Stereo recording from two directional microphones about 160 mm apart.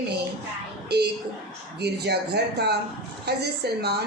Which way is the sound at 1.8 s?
90° right.